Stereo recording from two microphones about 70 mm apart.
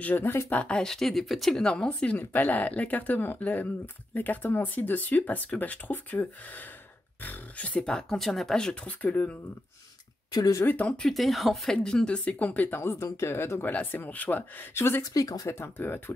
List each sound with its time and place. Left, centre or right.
0.0 s speech: left
0.6 s speech: centre
1.6 s speech: centre
8.8 s speech: left
10.9 s speech: centre; by 15.0 s left
15.1 s speech: left
15.4 s speech: left